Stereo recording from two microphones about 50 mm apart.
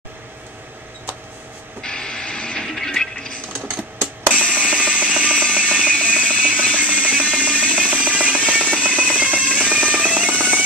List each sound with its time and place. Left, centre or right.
1.8 s music: centre
3.7 s music: right